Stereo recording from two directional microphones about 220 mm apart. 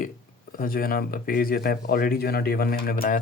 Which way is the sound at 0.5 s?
40° left (ahead or behind).